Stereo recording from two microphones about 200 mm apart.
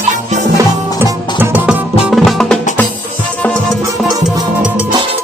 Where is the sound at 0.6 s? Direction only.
15° right (ahead or behind); by 2.5 s centre (ahead or behind).